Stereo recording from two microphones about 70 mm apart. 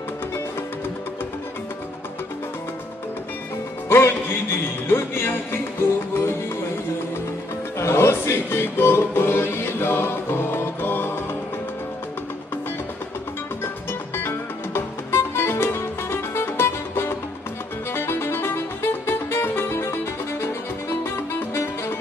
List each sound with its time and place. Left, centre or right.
3.9 s music: left
7.8 s music: left
14.1 s music: left